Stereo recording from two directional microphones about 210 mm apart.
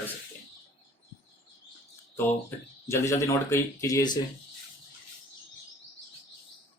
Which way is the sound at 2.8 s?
15° left (ahead or behind).